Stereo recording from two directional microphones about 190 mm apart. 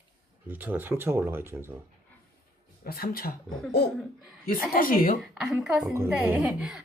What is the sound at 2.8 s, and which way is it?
Speech, 50° left (ahead or behind).